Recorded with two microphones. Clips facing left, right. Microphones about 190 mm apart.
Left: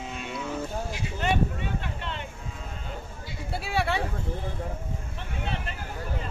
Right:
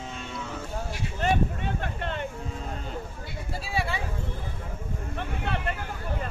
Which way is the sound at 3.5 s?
65° left (ahead or behind).